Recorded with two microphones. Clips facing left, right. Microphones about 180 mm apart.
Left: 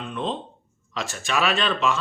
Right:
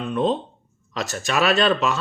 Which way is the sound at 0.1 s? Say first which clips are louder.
Right 8 dB; 40° right (ahead or behind).